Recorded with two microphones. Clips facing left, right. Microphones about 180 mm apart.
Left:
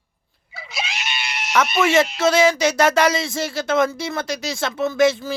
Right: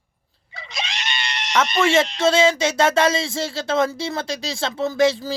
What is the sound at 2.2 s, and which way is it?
Speech, 25° right (ahead or behind).